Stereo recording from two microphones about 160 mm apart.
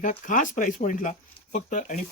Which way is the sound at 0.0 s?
55° left (ahead or behind).